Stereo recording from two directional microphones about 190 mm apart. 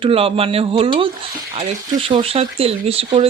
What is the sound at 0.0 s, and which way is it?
Speech, 30° right (ahead or behind).